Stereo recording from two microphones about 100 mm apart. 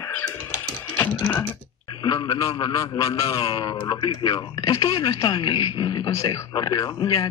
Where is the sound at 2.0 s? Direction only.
45° left (ahead or behind).